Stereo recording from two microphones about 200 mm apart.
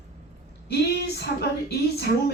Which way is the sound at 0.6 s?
55° left (ahead or behind).